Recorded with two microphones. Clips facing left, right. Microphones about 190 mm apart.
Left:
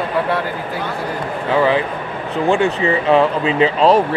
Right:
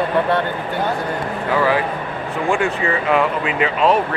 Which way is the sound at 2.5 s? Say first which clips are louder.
Left 4 dB; 25° left (ahead or behind).